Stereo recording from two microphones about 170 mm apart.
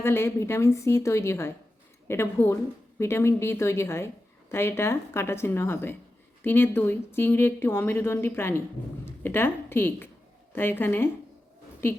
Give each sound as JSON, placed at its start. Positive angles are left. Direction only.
{"t": 0.0, "sound": "a woman's voice", "side_deg": 15}